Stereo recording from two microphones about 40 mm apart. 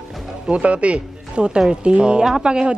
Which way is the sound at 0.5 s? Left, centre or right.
Right.